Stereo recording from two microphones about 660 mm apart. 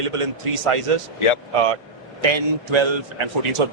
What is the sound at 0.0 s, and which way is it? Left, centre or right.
Speech, right.